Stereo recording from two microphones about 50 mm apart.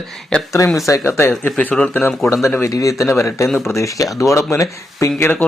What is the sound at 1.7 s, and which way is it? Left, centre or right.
Speech, centre.